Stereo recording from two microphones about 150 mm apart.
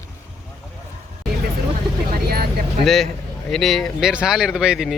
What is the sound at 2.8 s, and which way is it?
Speech, centre (ahead or behind).